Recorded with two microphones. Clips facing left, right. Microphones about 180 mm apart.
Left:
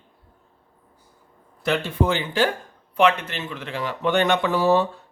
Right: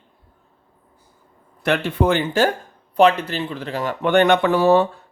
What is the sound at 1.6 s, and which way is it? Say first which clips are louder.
Speech: right 3 dB; 65° right (ahead or behind).